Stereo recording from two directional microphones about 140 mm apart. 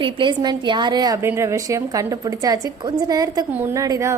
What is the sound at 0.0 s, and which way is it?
A woman's voice, 35° right (ahead or behind).